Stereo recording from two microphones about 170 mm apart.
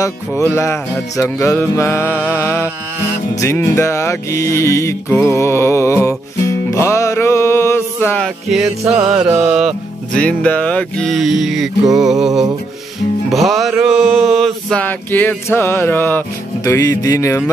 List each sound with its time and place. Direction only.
0.4 s music: 15° left (ahead or behind)
9.1 s music: 10° right (ahead or behind)
10.1 s music: 10° left (ahead or behind)
13.3 s music: centre (ahead or behind); by 17.5 s 15° left (ahead or behind)